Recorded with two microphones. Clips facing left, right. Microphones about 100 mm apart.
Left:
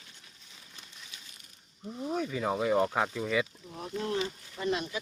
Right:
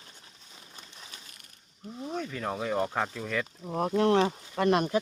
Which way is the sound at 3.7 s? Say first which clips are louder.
Right 10 dB; 55° right (ahead or behind).